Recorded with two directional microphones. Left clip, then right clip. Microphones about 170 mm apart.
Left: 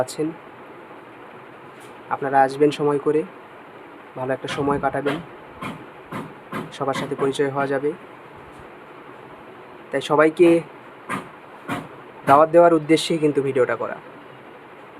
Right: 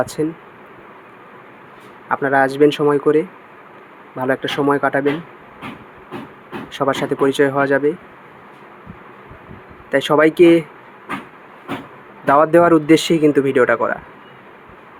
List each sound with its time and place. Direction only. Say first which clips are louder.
0.0 s speech: right 4 dB; 20° right (ahead or behind)
2.0 s speech: right 3 dB; 25° right (ahead or behind)
6.7 s speech: right 7 dB; 25° right (ahead or behind)
9.9 s speech: right 4 dB; 25° right (ahead or behind)
12.2 s speech: right 1 dB; 25° right (ahead or behind)